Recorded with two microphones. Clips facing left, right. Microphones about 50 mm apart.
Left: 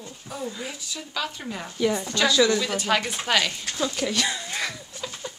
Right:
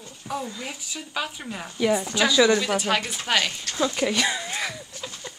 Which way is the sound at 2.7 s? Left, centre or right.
Centre.